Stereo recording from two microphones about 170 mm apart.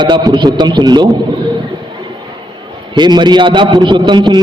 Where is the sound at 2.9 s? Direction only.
25° right (ahead or behind).